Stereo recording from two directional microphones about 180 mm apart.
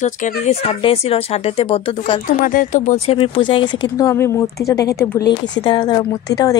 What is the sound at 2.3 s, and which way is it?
Speech, 50° left (ahead or behind).